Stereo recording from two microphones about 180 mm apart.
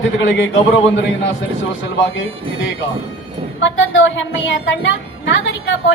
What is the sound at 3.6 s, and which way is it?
A woman's voice, 90° left.